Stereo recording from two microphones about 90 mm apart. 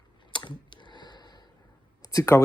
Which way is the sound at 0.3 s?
65° left (ahead or behind).